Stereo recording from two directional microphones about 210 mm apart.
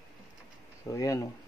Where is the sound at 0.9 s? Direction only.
15° left (ahead or behind).